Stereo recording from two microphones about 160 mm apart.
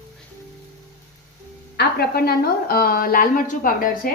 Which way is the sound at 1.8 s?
80° left.